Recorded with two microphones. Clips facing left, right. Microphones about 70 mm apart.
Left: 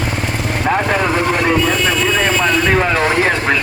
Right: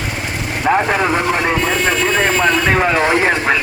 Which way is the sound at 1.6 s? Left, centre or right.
Right.